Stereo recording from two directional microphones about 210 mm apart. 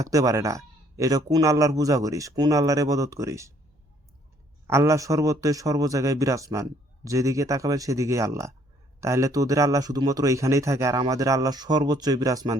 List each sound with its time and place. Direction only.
0.0 s speech: 15° right (ahead or behind)
4.6 s speech: 15° right (ahead or behind)